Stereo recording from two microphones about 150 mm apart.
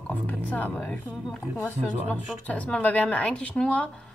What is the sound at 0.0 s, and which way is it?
A woman's voice, 10° left (ahead or behind).